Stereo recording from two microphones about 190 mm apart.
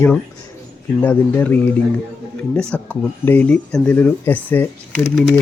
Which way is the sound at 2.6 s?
5° left (ahead or behind).